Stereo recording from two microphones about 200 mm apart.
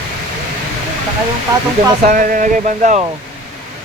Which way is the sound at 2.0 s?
40° right (ahead or behind).